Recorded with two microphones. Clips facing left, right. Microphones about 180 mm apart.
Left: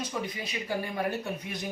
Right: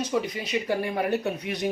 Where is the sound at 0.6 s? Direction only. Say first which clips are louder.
Right 2 dB; 70° right (ahead or behind).